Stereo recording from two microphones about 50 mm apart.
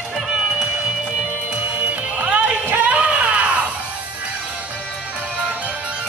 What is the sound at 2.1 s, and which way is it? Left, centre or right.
Music, right.